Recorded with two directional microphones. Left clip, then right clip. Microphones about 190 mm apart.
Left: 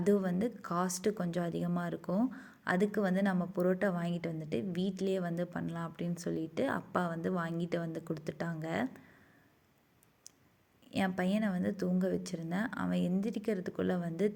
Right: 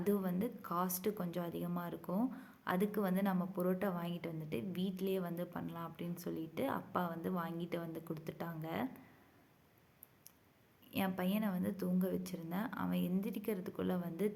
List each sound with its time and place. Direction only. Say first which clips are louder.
0.0 s a woman's voice: left 6 dB; 25° left (ahead or behind)
10.9 s a woman's voice: left 5 dB; 25° left (ahead or behind)